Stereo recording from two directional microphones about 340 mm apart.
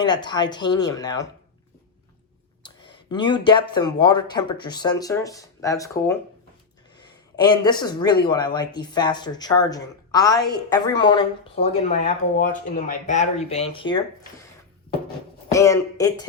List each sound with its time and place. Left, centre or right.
0.0 s speech: centre
2.6 s speech: centre
6.9 s a sound: centre
7.6 s speech: centre
15.5 s speech: centre